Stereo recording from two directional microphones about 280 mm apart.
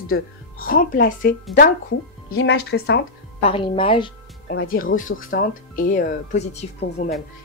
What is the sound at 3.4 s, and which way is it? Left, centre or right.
Speech, centre.